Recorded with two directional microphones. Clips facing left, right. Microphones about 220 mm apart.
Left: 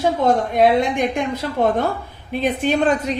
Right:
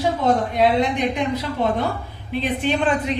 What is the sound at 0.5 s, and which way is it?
Speech, 50° left (ahead or behind).